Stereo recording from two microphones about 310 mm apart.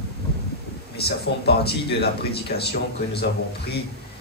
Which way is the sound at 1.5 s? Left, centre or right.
Left.